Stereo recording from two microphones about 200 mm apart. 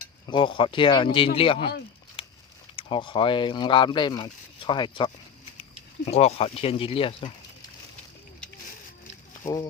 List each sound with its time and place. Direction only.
0.3 s speech: 25° left (ahead or behind)
2.2 s a sound: 30° left (ahead or behind)
2.7 s speech: 25° left (ahead or behind)
9.4 s speech: 15° left (ahead or behind)